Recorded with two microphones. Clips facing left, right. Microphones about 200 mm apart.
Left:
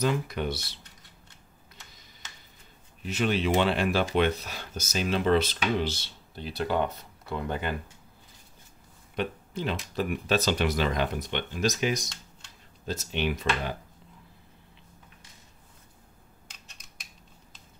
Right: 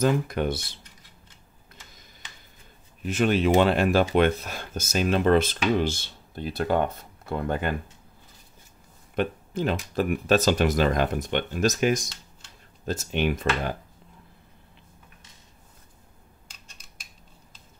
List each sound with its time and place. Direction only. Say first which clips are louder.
0.0 s speech: right 4 dB; 50° right (ahead or behind)
3.0 s speech: right 4 dB; 50° right (ahead or behind)
9.1 s speech: right 5 dB; 50° right (ahead or behind)